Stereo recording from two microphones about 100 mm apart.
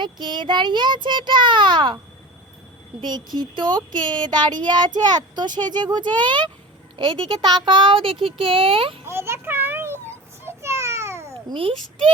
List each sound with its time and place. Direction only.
0.0 s speech: 50° right (ahead or behind)
3.0 s speech: 45° right (ahead or behind); by 9.0 s 65° right (ahead or behind)
9.0 s children playing: 25° right (ahead or behind)
10.4 s a sound: 30° right (ahead or behind)